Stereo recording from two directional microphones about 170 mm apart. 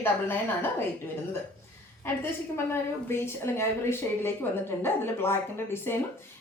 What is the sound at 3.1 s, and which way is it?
A woman's voice, 15° left (ahead or behind).